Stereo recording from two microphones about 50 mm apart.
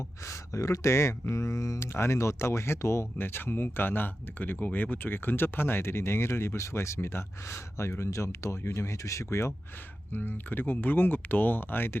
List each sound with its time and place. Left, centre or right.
0.3 s speech: left
1.9 s speech: left
3.2 s speech: left
10.1 s speech: left